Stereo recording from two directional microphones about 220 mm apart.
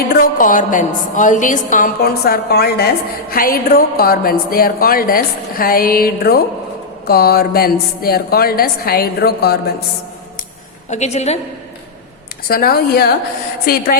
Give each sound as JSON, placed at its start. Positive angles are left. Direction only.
{"t": 0.1, "sound": "a woman's voice", "side_deg": 40}
{"t": 10.8, "sound": "a woman's voice", "side_deg": 30}
{"t": 12.5, "sound": "a woman's voice", "side_deg": 40}